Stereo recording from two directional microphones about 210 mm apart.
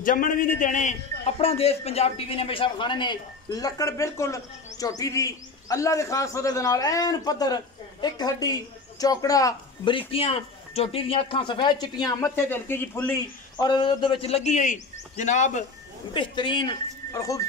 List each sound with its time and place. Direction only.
0.0 s a man's voice: 40° left (ahead or behind)
16.1 s speech: 25° left (ahead or behind)